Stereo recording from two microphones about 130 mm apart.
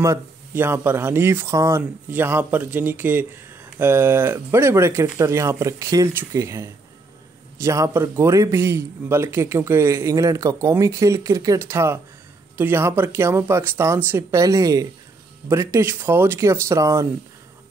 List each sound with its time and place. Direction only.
0.0 s a man's voice: 20° right (ahead or behind)